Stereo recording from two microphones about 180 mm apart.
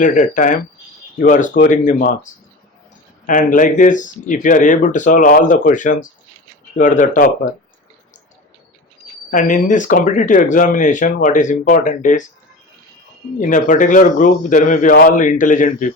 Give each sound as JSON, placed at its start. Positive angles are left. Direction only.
{"t": 0.0, "sound": "speech", "side_deg": 45}
{"t": 9.3, "sound": "speech", "side_deg": 50}
{"t": 13.4, "sound": "speech", "side_deg": 45}